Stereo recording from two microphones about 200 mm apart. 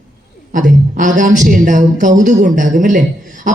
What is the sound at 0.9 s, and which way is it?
Speech, 40° right (ahead or behind).